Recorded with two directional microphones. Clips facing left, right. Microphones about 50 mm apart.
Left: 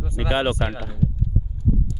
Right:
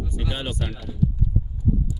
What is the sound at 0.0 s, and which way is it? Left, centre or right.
Speech, left.